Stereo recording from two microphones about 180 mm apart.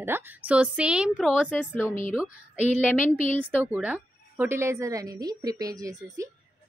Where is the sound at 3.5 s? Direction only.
10° right (ahead or behind).